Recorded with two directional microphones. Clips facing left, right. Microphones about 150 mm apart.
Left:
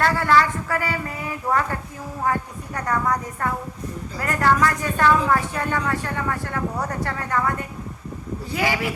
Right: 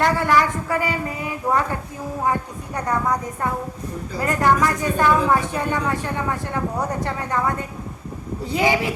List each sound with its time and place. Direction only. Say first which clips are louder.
0.0 s a woman's voice: right 1 dB; 15° right (ahead or behind)
2.7 s a woman's voice: right 1 dB; 20° right (ahead or behind)